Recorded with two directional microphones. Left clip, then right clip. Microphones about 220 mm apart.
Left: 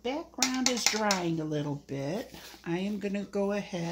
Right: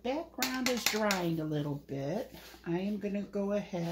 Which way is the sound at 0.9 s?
30° left (ahead or behind).